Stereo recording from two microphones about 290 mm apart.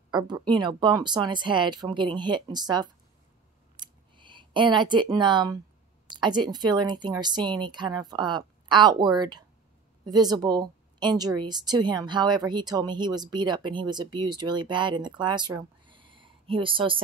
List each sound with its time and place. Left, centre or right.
0.1 s a woman's voice: centre
3.8 s a sound: centre
6.0 s a woman's voice: centre